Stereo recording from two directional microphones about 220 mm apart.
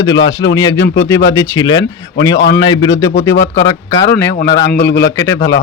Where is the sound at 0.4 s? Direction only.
15° left (ahead or behind).